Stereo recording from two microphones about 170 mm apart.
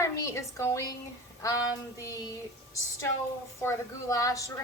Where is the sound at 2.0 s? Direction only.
20° left (ahead or behind).